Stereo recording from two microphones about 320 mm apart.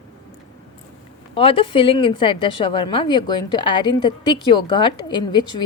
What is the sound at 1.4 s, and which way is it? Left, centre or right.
Speech, centre.